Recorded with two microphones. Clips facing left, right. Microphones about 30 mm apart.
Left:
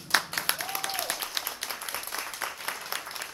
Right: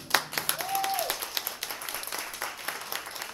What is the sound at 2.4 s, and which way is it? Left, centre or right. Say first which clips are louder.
Applause: left 1 dB; centre.